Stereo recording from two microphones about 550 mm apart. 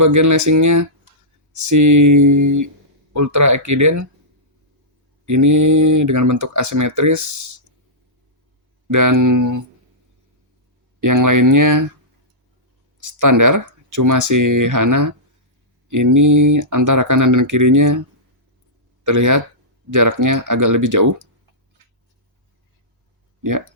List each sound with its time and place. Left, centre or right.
0.0 s speech: right
5.2 s speech: right
8.9 s speech: right
11.0 s speech: right
13.0 s speech: right
19.0 s speech: right
23.4 s speech: right